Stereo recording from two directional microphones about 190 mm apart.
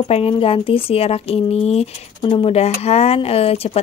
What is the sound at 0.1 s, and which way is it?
A woman's voice, 30° left (ahead or behind).